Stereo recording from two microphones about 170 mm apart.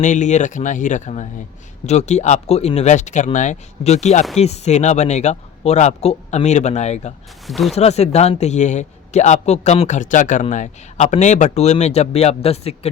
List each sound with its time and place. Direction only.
0.0 s a man's voice: 45° left (ahead or behind)
7.4 s speech: centre (ahead or behind)
7.8 s a man's voice: 40° left (ahead or behind)